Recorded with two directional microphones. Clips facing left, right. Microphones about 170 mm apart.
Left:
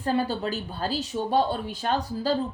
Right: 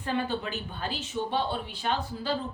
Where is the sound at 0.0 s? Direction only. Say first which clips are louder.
Left 4 dB; 35° left (ahead or behind).